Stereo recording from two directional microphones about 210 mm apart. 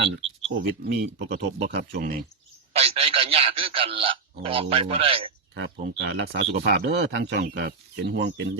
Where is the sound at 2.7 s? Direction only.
30° right (ahead or behind).